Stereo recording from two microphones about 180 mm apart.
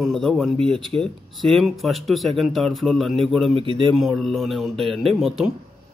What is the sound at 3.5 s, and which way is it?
Speech, 30° right (ahead or behind).